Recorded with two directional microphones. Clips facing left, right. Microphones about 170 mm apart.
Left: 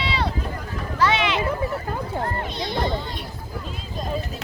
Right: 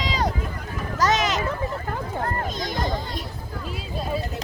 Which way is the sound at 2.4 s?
45° right (ahead or behind).